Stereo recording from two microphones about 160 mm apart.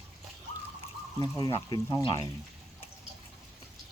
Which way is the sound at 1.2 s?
25° left (ahead or behind).